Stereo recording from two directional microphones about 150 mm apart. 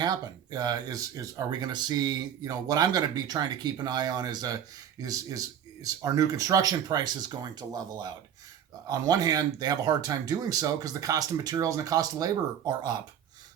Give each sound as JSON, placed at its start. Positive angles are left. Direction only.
{"t": 0.0, "sound": "speech", "side_deg": -25}